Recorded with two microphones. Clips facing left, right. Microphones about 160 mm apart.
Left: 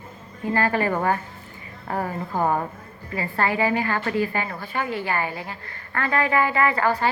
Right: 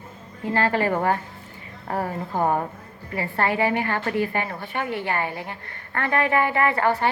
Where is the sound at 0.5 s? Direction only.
30° right (ahead or behind).